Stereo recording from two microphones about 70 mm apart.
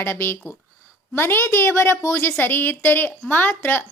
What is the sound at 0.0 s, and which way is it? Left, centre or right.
A woman's voice, left.